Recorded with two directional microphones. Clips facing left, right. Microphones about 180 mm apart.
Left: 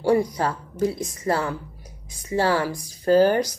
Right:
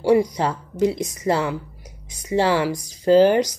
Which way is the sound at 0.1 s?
15° right (ahead or behind).